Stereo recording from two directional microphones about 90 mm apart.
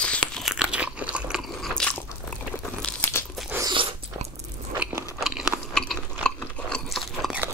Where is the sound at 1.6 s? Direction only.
10° left (ahead or behind).